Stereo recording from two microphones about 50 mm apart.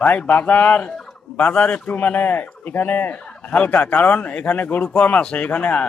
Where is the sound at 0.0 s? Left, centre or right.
Left.